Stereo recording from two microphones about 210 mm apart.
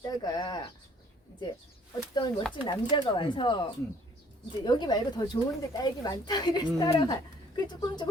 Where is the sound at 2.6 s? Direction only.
20° left (ahead or behind).